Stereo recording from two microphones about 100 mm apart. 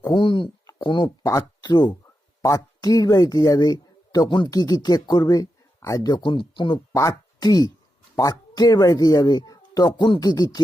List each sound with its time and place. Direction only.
0.1 s speech: 50° left (ahead or behind)
1.0 s speech: 35° left (ahead or behind)
2.4 s speech: 35° left (ahead or behind); by 6.7 s 55° left (ahead or behind)
6.9 s speech: 35° left (ahead or behind)